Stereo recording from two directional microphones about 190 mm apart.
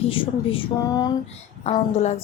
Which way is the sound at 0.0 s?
30° left (ahead or behind).